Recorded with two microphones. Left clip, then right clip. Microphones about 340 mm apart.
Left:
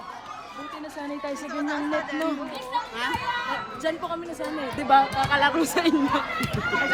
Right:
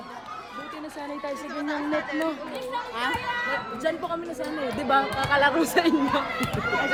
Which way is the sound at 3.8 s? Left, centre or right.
Centre.